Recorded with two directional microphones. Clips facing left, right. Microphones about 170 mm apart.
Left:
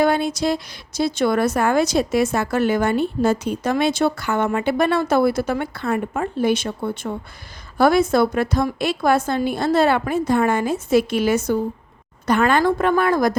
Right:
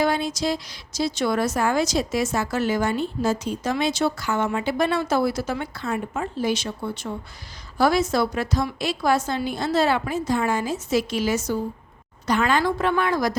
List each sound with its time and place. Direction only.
0.0 s a woman's voice: 55° left (ahead or behind)